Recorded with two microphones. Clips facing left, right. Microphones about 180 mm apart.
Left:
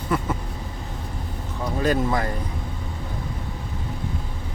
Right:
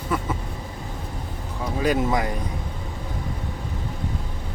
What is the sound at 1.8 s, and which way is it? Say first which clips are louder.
Speech: even; 15° right (ahead or behind).